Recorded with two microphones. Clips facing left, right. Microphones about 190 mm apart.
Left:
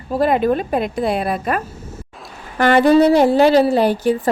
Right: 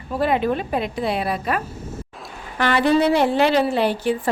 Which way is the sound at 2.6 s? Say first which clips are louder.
Left 6 dB; 45° left (ahead or behind).